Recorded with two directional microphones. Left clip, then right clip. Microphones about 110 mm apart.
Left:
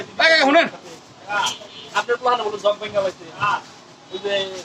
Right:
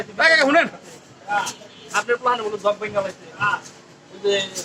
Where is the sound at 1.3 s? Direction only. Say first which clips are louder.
Left 1 dB; 30° left (ahead or behind).